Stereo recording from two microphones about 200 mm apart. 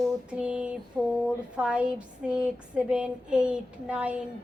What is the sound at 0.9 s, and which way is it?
Speech, 5° right (ahead or behind).